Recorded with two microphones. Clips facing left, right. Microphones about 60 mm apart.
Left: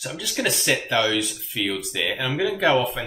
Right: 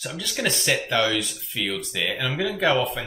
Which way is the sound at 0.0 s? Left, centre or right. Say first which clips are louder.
Left 1 dB; centre.